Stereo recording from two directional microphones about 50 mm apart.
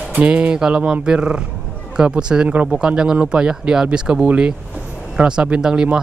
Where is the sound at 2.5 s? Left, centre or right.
Right.